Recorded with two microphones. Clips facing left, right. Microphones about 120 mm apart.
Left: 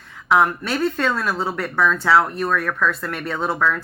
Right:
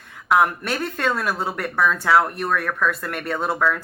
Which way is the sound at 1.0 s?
5° right (ahead or behind).